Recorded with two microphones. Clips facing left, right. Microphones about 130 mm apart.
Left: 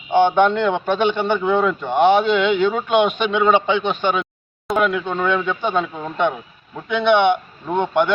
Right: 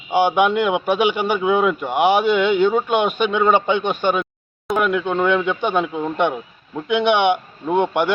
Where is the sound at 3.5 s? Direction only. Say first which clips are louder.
Even; 50° right (ahead or behind).